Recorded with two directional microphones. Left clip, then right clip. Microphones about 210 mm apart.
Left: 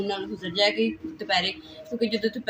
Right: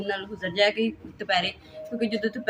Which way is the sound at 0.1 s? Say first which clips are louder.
Even; 5° right (ahead or behind).